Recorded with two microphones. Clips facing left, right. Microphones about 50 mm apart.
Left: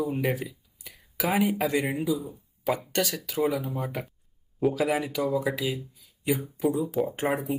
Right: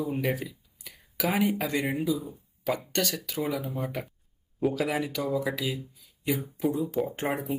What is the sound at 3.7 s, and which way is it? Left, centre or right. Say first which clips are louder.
Speech: left 1 dB; centre.